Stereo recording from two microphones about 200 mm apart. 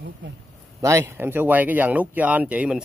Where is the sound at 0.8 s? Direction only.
15° right (ahead or behind).